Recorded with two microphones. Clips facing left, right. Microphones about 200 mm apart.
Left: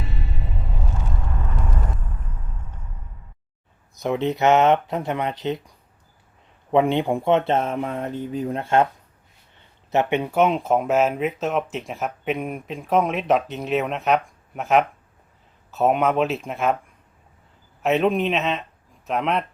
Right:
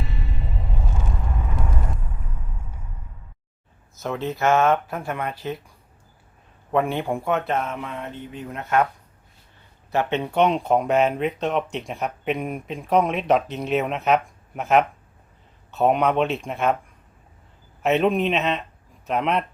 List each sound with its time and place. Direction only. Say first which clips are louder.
2.0 s a sound: even; 10° right (ahead or behind)
4.0 s speech: left 3 dB; 15° left (ahead or behind)
6.7 s speech: left 4 dB; 20° left (ahead or behind)
9.9 s speech: left 2 dB; 15° left (ahead or behind); by 16.7 s centre (ahead or behind)
17.8 s speech: even; centre (ahead or behind)